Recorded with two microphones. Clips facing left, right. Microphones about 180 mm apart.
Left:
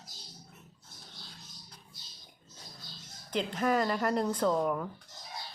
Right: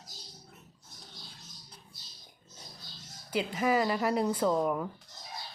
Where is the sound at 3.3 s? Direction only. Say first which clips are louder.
Right 1 dB; 5° right (ahead or behind).